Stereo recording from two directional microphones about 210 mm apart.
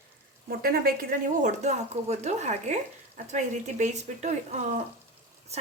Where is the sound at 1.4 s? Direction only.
35° right (ahead or behind).